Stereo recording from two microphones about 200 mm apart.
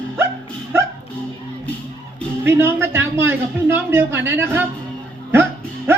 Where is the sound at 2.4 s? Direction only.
10° right (ahead or behind).